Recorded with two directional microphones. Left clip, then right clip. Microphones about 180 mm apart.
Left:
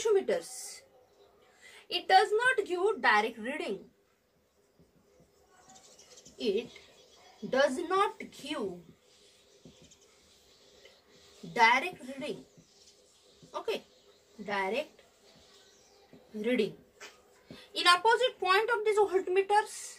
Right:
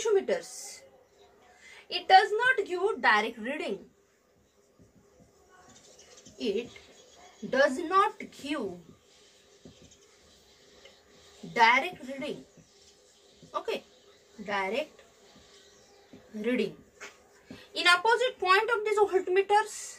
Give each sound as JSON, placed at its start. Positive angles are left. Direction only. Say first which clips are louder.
{"t": 0.0, "sound": "a woman's voice", "louder": "right 1 dB", "side_deg": 10}
{"t": 1.9, "sound": "a woman's voice", "louder": "right 3 dB", "side_deg": 10}
{"t": 5.7, "sound": "bird", "louder": "left 1 dB", "side_deg": 40}
{"t": 6.3, "sound": "a woman's voice", "louder": "even", "side_deg": 10}
{"t": 11.5, "sound": "a woman's voice", "louder": "right 2 dB", "side_deg": 10}
{"t": 13.5, "sound": "a woman's voice", "louder": "right 2 dB", "side_deg": 10}
{"t": 16.3, "sound": "a woman's voice", "louder": "even", "side_deg": 10}
{"t": 17.7, "sound": "a woman's voice", "louder": "right 1 dB", "side_deg": 10}